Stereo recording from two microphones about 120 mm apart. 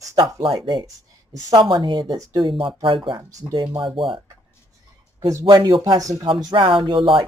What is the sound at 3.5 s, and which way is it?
Speech, 40° right (ahead or behind).